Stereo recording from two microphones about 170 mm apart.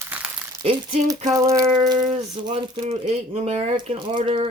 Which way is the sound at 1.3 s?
20° right (ahead or behind).